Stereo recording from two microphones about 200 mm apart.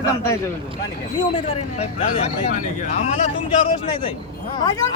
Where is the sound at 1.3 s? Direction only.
30° left (ahead or behind).